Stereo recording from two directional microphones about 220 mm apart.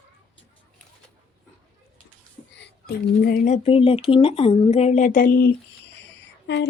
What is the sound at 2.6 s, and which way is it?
Speech, 45° left (ahead or behind).